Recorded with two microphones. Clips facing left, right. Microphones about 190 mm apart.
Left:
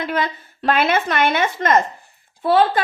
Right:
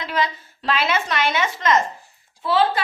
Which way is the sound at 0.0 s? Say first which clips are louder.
Left 2 dB; 55° left (ahead or behind).